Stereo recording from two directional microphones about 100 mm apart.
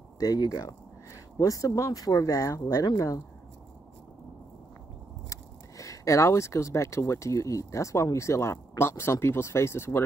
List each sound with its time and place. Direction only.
0.2 s speech: 40° left (ahead or behind)
5.3 s speech: 30° left (ahead or behind)